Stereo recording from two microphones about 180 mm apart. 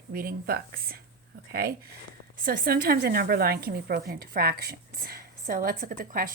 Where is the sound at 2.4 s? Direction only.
55° right (ahead or behind).